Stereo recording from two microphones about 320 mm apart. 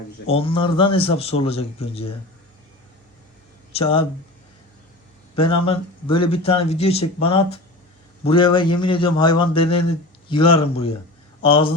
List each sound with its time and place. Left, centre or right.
0.3 s a man's voice: centre
3.7 s speech: centre
5.6 s a man's voice: centre